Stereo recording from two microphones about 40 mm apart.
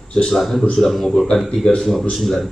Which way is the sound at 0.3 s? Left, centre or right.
Centre.